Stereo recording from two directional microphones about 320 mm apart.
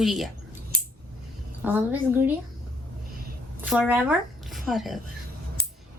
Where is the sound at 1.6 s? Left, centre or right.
Centre.